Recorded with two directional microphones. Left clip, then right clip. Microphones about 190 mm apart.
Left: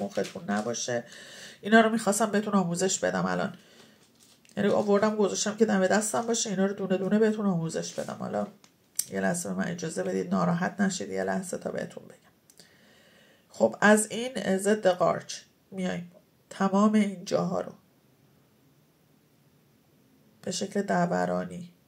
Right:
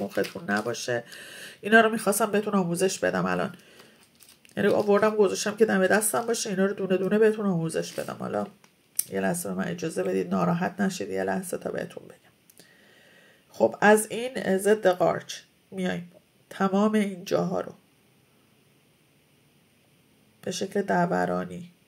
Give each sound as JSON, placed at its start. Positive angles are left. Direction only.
{"t": 0.1, "sound": "speech", "side_deg": -40}
{"t": 20.3, "sound": "speech", "side_deg": -30}